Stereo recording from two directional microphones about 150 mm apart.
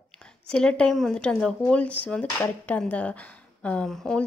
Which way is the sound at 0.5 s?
5° left (ahead or behind).